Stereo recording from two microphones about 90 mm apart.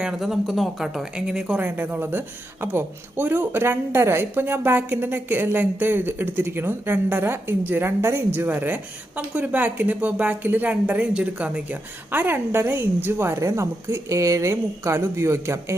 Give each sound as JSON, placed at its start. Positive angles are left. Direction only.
{"t": 0.0, "sound": "speech", "side_deg": -5}
{"t": 1.6, "sound": "speech", "side_deg": -20}